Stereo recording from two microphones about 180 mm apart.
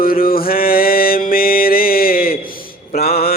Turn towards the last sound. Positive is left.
turn(degrees=60)  # may be behind; listen again after turning